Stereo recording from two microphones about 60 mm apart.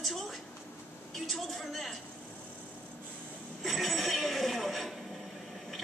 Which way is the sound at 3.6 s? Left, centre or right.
Centre.